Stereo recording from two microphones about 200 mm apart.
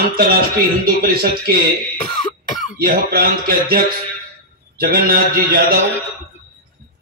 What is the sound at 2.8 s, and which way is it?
A man's voice, 50° right (ahead or behind).